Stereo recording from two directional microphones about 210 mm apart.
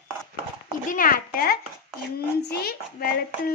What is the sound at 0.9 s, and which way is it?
Speech, 40° left (ahead or behind).